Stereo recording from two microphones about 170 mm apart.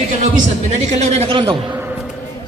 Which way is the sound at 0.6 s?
40° right (ahead or behind).